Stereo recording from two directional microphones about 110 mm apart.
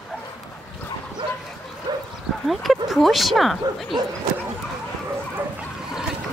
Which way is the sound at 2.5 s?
Centre (ahead or behind).